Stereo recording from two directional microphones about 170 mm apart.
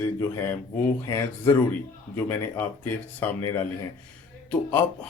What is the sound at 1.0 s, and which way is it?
Speech, 20° left (ahead or behind).